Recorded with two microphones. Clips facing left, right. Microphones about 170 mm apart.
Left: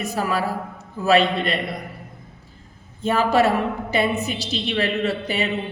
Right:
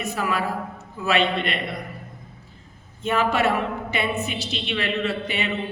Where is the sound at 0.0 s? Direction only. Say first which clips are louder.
Left 2 dB; 35° left (ahead or behind).